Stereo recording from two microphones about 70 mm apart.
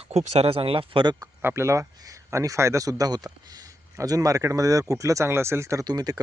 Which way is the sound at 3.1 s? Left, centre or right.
Right.